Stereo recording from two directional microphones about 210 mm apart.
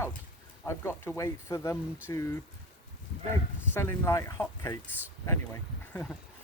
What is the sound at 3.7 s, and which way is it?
Speech, 10° left (ahead or behind).